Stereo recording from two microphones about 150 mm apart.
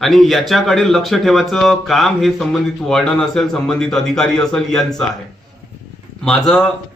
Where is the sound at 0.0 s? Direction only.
Centre (ahead or behind).